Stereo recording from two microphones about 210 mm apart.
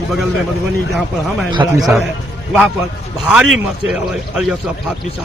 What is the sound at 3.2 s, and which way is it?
Speech, 5° right (ahead or behind).